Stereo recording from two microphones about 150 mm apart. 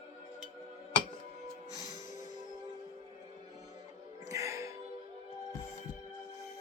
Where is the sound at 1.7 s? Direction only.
25° right (ahead or behind).